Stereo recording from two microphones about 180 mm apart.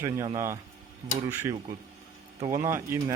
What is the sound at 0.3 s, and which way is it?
Speech, 15° right (ahead or behind).